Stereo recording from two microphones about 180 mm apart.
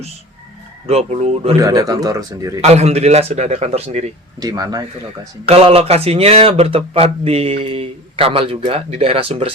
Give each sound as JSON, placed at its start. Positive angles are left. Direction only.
{"t": 0.9, "sound": "speech", "side_deg": -35}
{"t": 1.5, "sound": "speech", "side_deg": -20}
{"t": 2.6, "sound": "speech", "side_deg": -35}
{"t": 4.4, "sound": "speech", "side_deg": -20}
{"t": 5.5, "sound": "speech", "side_deg": -30}